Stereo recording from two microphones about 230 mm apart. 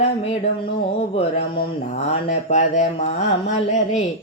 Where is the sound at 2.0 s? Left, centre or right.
Left.